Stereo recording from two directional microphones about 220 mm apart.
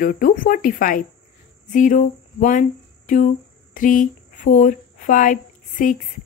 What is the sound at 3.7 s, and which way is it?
Speech, 35° left (ahead or behind).